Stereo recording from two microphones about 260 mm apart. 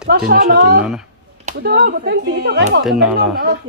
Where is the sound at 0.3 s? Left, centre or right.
Right.